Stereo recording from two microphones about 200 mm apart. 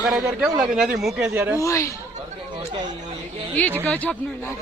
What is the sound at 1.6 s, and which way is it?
Speech, 15° left (ahead or behind).